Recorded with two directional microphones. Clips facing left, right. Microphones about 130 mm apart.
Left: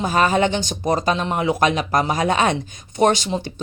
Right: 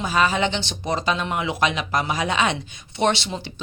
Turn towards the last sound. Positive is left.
turn(degrees=45)  # may be behind; listen again after turning